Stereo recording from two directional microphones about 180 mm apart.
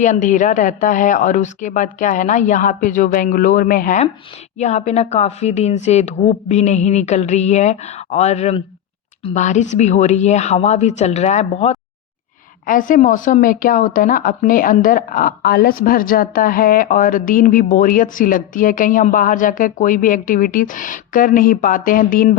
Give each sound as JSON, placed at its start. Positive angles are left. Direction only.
{"t": 0.0, "sound": "a woman's voice", "side_deg": 45}
{"t": 4.5, "sound": "speech", "side_deg": 40}
{"t": 12.6, "sound": "a woman's voice", "side_deg": 50}